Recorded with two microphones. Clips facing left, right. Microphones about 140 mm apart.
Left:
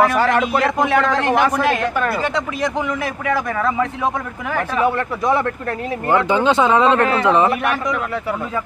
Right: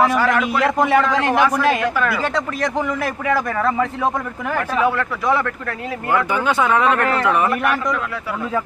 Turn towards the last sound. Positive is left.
turn(degrees=25)  # may be behind; listen again after turning